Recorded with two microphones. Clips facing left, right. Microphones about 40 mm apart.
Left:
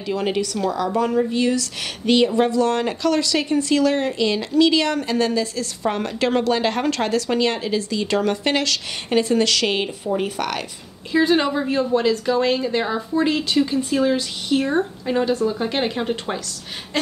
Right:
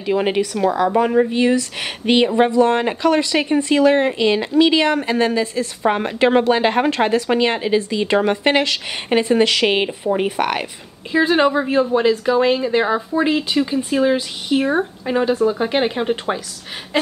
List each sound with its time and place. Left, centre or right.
0.0 s speech: right
11.1 s a woman's voice: centre
16.9 s a sound: centre